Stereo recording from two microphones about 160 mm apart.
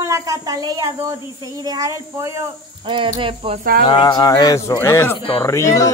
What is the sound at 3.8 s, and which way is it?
A man's voice, 25° left (ahead or behind).